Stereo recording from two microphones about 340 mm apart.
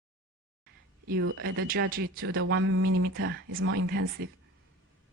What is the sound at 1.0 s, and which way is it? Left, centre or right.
Speech, right.